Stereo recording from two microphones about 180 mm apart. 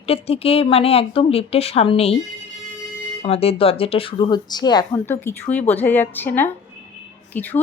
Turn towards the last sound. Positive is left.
turn(degrees=10)  # may be behind; listen again after turning